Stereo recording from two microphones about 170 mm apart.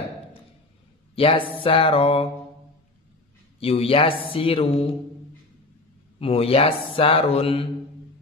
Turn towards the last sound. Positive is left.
turn(degrees=35)  # may be behind; listen again after turning